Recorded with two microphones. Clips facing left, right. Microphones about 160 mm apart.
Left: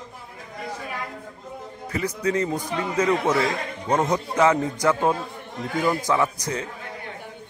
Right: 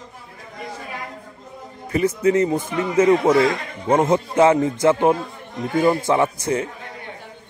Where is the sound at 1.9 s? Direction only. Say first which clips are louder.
Right 7 dB; 25° right (ahead or behind).